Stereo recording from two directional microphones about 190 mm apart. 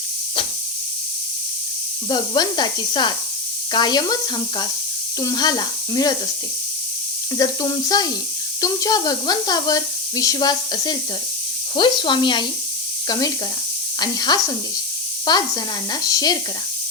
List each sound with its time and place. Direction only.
2.0 s speech: 20° left (ahead or behind)
7.3 s speech: 20° left (ahead or behind)